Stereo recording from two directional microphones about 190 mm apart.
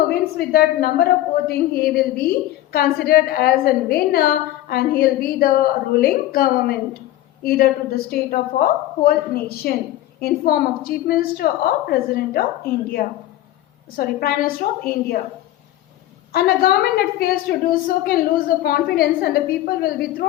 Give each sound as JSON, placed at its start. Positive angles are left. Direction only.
{"t": 0.1, "sound": "a woman's voice", "side_deg": 55}
{"t": 16.3, "sound": "a woman's voice", "side_deg": 55}